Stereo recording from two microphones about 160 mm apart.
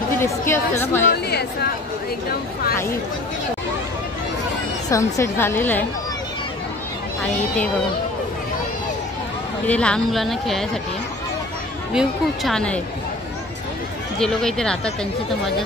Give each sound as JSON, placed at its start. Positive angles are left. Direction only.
{"t": 0.2, "sound": "a woman's voice", "side_deg": 15}
{"t": 1.1, "sound": "speech", "side_deg": 85}
{"t": 4.8, "sound": "a woman's voice", "side_deg": 20}
{"t": 7.3, "sound": "a woman's voice", "side_deg": 10}
{"t": 9.7, "sound": "speech", "side_deg": 5}
{"t": 11.9, "sound": "speech", "side_deg": 0}
{"t": 14.2, "sound": "speech", "side_deg": 5}